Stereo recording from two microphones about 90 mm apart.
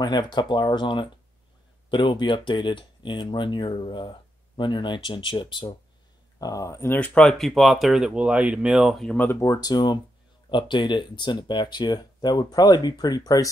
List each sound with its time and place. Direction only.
0.0 s speech: 55° left (ahead or behind)
6.4 s speech: 40° left (ahead or behind)
7.0 s speech: 10° left (ahead or behind); by 8.9 s 10° right (ahead or behind)
9.0 s speech: 15° left (ahead or behind)
9.3 s speech: 35° left (ahead or behind)